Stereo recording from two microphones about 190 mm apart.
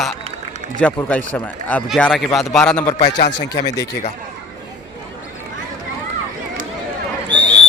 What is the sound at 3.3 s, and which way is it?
Speech, 25° left (ahead or behind).